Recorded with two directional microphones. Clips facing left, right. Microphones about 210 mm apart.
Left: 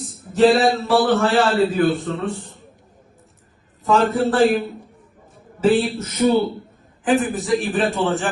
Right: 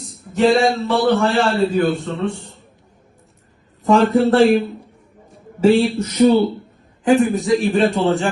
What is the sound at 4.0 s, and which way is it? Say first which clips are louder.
Speech: right 3 dB; centre (ahead or behind).